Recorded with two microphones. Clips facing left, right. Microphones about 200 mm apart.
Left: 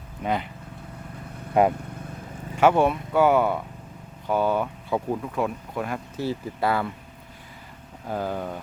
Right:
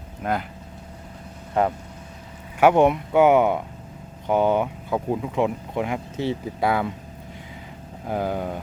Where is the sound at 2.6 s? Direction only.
15° right (ahead or behind).